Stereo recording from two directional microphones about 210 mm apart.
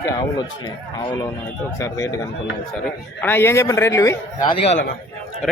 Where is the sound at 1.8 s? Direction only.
15° left (ahead or behind).